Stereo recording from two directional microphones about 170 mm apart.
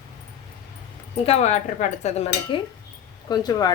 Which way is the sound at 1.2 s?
40° left (ahead or behind).